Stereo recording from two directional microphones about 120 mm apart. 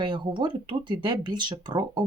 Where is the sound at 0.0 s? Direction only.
45° right (ahead or behind).